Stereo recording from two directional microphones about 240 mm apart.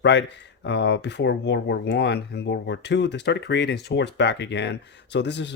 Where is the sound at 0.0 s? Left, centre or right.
Left.